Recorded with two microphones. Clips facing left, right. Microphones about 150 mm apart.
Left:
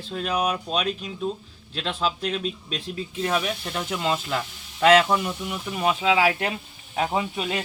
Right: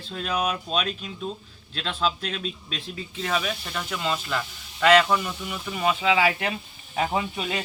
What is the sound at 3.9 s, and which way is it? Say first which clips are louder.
Speech: left 2 dB; 10° left (ahead or behind).